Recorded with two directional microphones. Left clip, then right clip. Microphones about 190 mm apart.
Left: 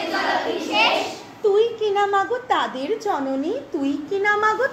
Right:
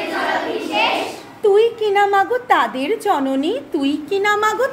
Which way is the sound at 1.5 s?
20° right (ahead or behind).